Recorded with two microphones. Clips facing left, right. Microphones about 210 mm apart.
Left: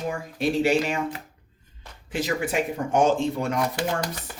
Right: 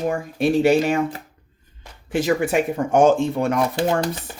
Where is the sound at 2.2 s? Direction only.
55° right (ahead or behind).